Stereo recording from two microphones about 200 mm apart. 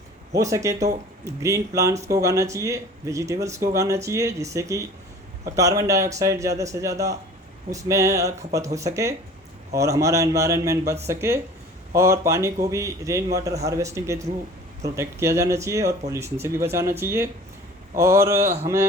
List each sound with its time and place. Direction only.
0.3 s speech: 15° right (ahead or behind)